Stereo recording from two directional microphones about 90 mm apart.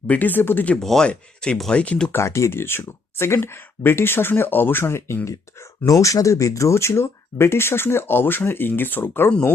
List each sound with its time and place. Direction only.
0.1 s speech: 20° left (ahead or behind)
0.8 s speech: 5° left (ahead or behind)
2.1 s speech: 30° left (ahead or behind)